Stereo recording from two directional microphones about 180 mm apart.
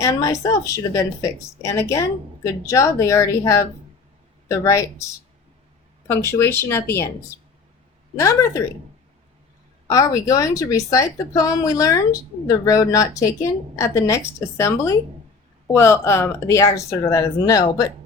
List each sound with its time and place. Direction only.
0.0 s a woman's voice: 20° left (ahead or behind)
6.1 s a woman's voice: 15° left (ahead or behind)
8.2 s a woman's voice: 15° left (ahead or behind)
9.8 s a woman's voice: 20° left (ahead or behind)